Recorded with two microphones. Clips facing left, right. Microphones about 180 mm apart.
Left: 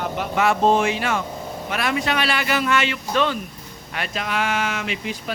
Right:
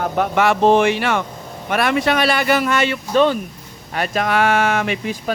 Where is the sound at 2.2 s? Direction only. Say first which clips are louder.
Right 6 dB; 45° right (ahead or behind).